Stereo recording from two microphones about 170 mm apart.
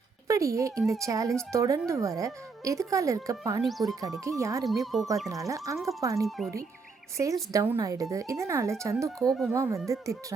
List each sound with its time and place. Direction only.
0.3 s speech: 20° right (ahead or behind)
3.7 s speech: centre (ahead or behind)
4.2 s speech: 20° right (ahead or behind)
4.6 s speech: centre (ahead or behind)
5.3 s speech: 20° right (ahead or behind)
5.7 s speech: centre (ahead or behind)
6.0 s speech: 20° right (ahead or behind)
6.2 s speech: centre (ahead or behind)
7.2 s speech: 20° right (ahead or behind)